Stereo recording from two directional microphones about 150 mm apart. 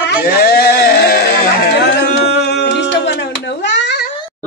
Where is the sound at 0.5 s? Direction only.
90° left.